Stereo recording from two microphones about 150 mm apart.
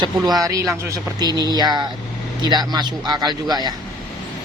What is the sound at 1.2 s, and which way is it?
Speech, 25° right (ahead or behind).